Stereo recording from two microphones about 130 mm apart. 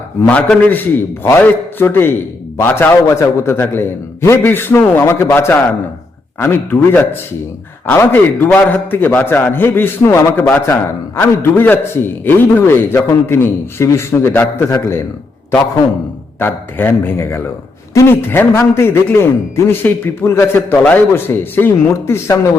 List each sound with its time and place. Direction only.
0.4 s a man's voice: 10° left (ahead or behind)
16.4 s a man's voice: 15° left (ahead or behind)